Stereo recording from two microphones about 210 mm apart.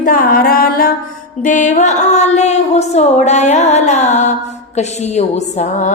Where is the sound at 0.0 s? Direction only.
40° left (ahead or behind).